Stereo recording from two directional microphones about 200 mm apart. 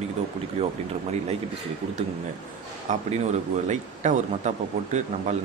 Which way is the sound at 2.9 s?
35° right (ahead or behind).